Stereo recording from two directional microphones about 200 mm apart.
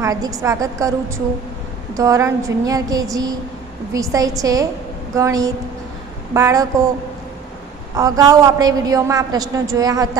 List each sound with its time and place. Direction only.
0.0 s a woman's voice: 15° right (ahead or behind)
7.9 s a woman's voice: 15° right (ahead or behind)